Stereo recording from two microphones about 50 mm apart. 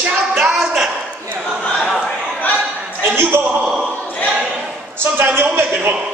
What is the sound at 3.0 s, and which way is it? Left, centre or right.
Speech, right.